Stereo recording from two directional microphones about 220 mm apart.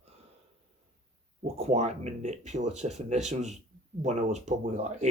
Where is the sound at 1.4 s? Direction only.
30° right (ahead or behind).